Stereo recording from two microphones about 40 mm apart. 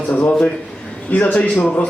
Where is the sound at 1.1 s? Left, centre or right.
Left.